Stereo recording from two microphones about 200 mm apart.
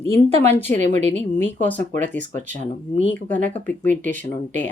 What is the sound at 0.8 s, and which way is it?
Speech, 35° right (ahead or behind).